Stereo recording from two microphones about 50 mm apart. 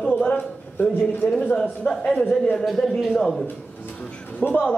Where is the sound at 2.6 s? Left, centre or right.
Centre.